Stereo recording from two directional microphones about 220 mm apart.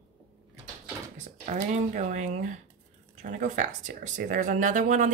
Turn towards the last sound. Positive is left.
turn(degrees=-35)  # may be behind; listen again after turning